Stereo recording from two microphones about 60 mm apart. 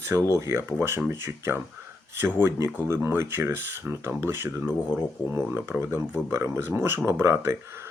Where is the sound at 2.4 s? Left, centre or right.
Right.